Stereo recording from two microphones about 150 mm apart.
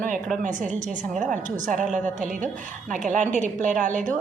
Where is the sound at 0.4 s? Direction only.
55° right (ahead or behind).